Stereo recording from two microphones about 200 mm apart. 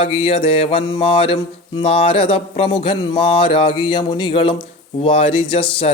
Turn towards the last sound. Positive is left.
turn(degrees=25)  # may be behind; listen again after turning